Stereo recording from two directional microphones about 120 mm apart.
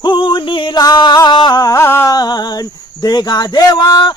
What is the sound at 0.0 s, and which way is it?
Music, 45° left (ahead or behind).